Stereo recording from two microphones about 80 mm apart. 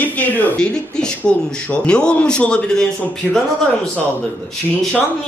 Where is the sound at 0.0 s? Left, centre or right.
Centre.